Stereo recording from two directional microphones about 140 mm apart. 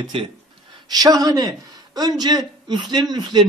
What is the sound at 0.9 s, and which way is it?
A man's voice, 25° right (ahead or behind).